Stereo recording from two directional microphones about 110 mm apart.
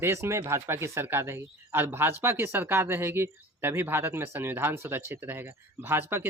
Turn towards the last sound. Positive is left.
turn(degrees=-20)  # may be behind; listen again after turning